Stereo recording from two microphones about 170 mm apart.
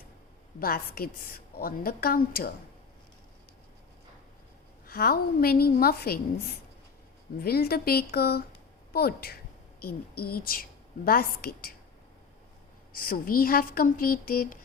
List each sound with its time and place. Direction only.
0.6 s a woman's voice: 60° left (ahead or behind)
4.9 s a woman's voice: 65° left (ahead or behind)
12.9 s a woman's voice: 55° left (ahead or behind)